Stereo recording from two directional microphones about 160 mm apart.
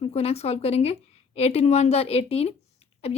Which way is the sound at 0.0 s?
40° left (ahead or behind).